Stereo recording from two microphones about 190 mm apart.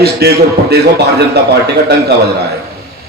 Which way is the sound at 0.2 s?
55° right (ahead or behind).